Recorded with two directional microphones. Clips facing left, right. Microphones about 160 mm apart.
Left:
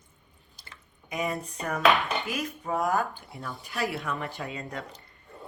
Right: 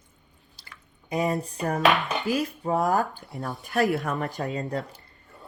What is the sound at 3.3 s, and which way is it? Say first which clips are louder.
Speech: right 7 dB; 45° right (ahead or behind).